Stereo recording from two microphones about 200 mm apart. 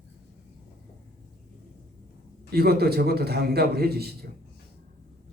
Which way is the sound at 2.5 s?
50° right (ahead or behind).